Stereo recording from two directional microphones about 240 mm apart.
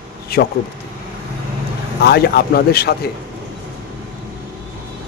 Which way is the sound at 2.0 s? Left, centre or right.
Left.